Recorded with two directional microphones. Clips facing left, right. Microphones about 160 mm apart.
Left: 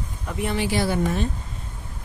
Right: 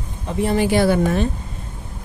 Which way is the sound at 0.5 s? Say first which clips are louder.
Right 7 dB; 50° right (ahead or behind).